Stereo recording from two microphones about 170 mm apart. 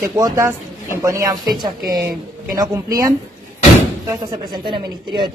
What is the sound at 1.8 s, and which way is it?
Speech, 60° right (ahead or behind).